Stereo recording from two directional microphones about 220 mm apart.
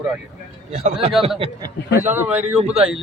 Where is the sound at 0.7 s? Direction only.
30° right (ahead or behind).